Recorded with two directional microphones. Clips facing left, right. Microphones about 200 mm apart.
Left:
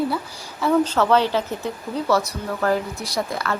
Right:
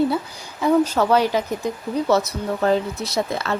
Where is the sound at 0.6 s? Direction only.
15° right (ahead or behind).